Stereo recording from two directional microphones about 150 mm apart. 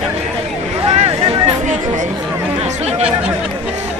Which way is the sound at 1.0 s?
40° right (ahead or behind).